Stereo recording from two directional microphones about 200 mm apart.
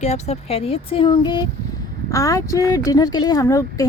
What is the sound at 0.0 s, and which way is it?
Speech, 35° left (ahead or behind).